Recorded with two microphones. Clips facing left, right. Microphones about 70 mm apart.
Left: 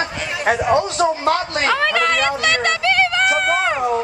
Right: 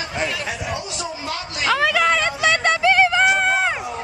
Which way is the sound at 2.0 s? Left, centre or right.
Centre.